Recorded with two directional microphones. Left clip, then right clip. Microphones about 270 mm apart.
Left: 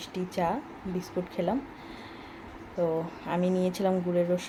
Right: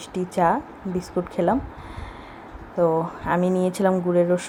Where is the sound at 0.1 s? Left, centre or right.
Centre.